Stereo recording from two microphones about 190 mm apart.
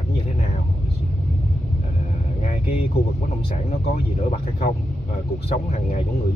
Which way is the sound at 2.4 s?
35° left (ahead or behind).